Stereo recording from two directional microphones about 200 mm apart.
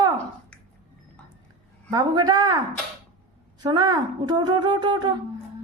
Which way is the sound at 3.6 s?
20° right (ahead or behind).